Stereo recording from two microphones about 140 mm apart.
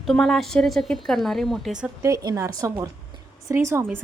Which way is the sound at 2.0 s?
25° right (ahead or behind).